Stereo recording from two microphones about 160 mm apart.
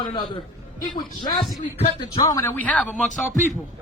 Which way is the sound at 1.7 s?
40° left (ahead or behind).